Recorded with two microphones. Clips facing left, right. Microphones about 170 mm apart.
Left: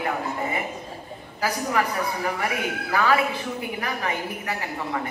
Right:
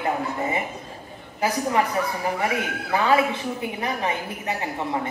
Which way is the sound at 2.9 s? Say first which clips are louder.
Right 2 dB; 25° right (ahead or behind).